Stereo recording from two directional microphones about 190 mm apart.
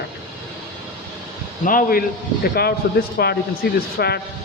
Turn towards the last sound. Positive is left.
turn(degrees=55)  # may be behind; listen again after turning